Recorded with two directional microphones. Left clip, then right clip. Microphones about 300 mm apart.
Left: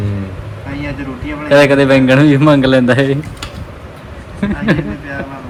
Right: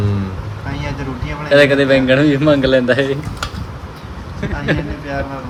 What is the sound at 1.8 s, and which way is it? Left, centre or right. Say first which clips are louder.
Speech: left 3 dB; centre.